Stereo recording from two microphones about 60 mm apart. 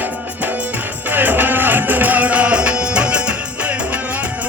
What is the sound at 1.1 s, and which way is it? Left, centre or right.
Music, right.